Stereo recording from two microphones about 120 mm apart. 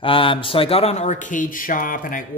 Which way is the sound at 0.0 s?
45° left (ahead or behind).